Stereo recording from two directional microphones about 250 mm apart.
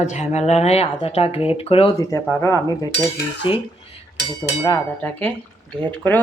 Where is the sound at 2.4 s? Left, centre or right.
Centre.